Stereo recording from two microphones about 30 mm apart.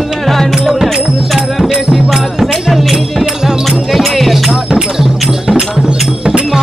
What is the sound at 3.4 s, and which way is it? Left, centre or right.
Music, centre.